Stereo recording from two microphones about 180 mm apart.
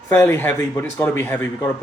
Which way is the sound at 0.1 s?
10° left (ahead or behind).